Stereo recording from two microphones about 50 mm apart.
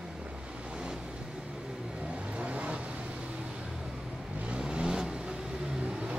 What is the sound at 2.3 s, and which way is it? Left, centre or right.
Vehicle, right.